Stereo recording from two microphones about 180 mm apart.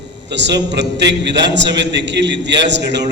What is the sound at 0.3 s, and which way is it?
A man's voice, 75° right (ahead or behind).